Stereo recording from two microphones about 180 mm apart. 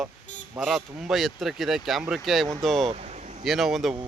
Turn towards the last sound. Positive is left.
turn(degrees=0)  # may be behind; listen again after turning